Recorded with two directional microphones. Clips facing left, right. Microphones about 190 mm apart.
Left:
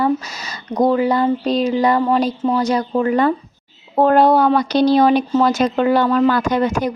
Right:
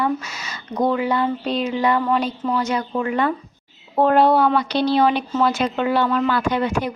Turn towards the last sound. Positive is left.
turn(degrees=40)  # may be behind; listen again after turning